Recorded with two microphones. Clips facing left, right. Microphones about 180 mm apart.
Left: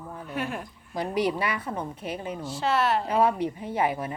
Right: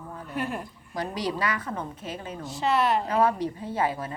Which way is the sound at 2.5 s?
Centre (ahead or behind).